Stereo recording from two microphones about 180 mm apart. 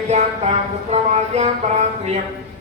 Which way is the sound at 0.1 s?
40° right (ahead or behind).